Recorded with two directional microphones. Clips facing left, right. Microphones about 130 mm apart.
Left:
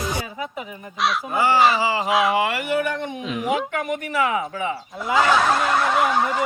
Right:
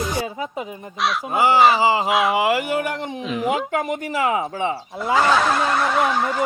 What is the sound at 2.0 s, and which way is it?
Speech, centre (ahead or behind).